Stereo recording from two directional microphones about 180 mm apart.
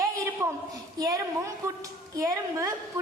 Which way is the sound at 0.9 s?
20° right (ahead or behind).